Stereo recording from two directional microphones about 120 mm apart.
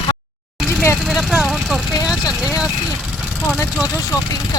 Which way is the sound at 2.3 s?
30° left (ahead or behind).